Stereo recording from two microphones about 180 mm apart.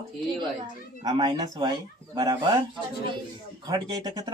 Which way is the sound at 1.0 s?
20° right (ahead or behind).